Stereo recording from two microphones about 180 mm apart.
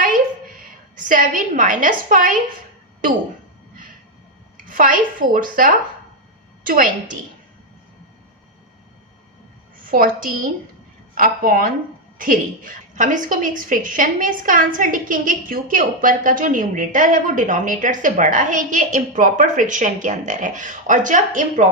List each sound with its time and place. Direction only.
0.0 s a sound: 50° right (ahead or behind)
4.5 s a woman's voice: 50° right (ahead or behind)
9.7 s a woman's voice: 50° right (ahead or behind)